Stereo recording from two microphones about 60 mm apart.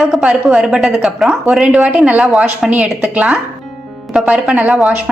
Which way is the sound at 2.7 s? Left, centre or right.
Right.